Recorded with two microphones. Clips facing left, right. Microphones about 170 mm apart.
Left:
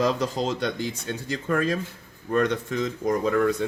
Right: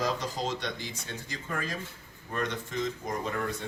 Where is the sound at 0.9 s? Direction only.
70° left (ahead or behind).